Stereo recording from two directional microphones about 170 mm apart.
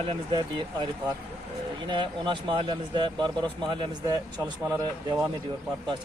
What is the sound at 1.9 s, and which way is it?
Speech, 30° right (ahead or behind).